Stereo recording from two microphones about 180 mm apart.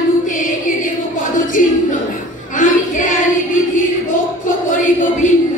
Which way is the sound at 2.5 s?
45° left (ahead or behind).